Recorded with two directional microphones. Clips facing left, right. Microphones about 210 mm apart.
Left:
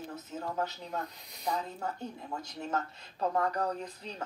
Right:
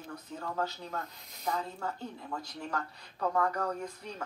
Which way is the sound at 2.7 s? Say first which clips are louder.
Left 5 dB; 20° left (ahead or behind).